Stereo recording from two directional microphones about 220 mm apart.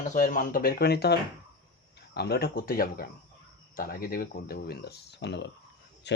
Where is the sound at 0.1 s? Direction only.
35° left (ahead or behind).